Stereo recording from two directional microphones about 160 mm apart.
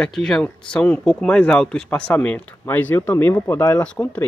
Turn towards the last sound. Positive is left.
turn(degrees=10)  # may be behind; listen again after turning